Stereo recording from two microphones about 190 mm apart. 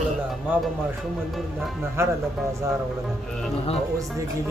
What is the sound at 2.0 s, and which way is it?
Speech, 15° right (ahead or behind).